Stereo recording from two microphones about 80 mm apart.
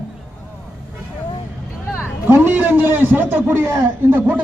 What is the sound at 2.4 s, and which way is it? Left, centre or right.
A man's voice, right.